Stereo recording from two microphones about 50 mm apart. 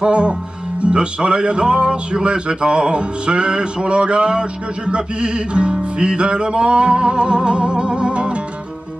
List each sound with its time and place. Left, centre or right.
0.0 s music: centre